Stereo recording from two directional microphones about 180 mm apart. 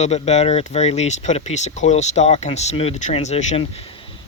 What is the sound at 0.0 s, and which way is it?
Speech, 35° left (ahead or behind).